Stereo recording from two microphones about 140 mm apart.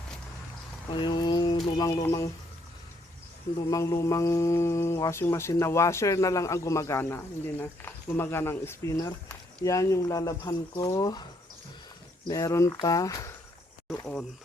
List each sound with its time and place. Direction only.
0.9 s a sound: 35° left (ahead or behind)
1.9 s speech: 20° left (ahead or behind)
3.7 s speech: 25° left (ahead or behind)
12.3 s speech: 20° left (ahead or behind)